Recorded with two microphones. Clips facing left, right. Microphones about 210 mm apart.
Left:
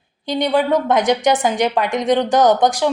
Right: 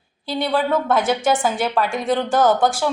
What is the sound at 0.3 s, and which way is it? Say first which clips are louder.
A woman's voice: left 3 dB; 20° left (ahead or behind).